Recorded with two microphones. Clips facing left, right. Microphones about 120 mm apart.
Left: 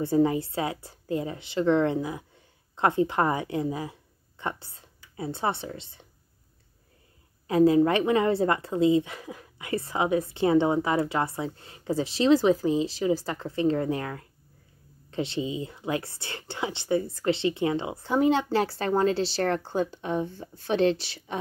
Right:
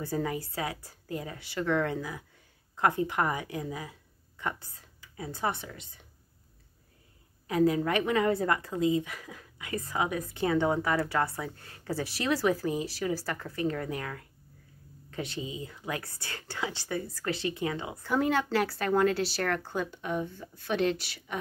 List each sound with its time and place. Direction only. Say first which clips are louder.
0.0 s a woman's voice: left 9 dB; 25° left (ahead or behind)
7.4 s a woman's voice: left 6 dB; 30° left (ahead or behind)